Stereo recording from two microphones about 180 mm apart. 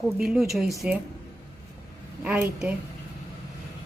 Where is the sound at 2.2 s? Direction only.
10° right (ahead or behind).